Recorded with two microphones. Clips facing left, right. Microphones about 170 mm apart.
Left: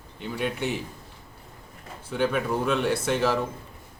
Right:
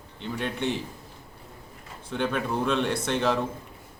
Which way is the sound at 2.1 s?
5° left (ahead or behind).